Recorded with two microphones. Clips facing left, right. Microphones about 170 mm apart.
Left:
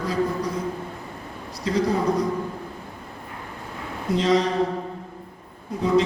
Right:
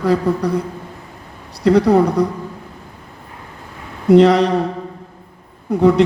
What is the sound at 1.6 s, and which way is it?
Speech, 65° right (ahead or behind).